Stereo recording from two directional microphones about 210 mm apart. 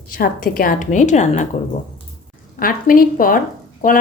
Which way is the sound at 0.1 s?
40° left (ahead or behind).